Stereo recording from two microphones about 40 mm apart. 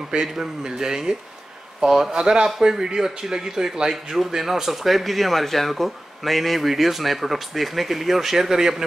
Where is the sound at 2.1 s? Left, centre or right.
Centre.